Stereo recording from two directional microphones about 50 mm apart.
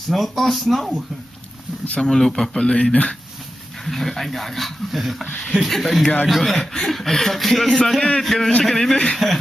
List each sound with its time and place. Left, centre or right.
0.1 s speech: centre
2.0 s speech: centre
2.7 s speech: left
3.8 s speech: centre
8.9 s speech: centre